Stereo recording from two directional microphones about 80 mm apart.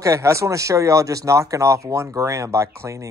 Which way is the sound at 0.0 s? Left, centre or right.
Right.